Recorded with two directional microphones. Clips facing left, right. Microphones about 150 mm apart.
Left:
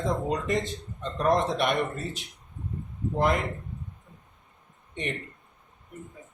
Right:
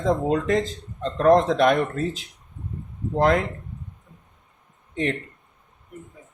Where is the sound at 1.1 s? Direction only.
90° right.